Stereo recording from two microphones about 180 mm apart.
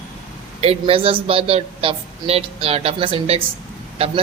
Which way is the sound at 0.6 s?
35° right (ahead or behind).